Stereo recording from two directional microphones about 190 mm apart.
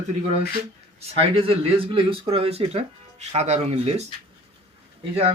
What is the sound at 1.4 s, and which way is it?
Speech, 30° right (ahead or behind).